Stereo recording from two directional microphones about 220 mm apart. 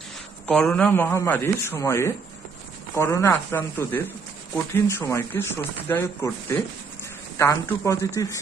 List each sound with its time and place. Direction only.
0.5 s speech: 5° left (ahead or behind)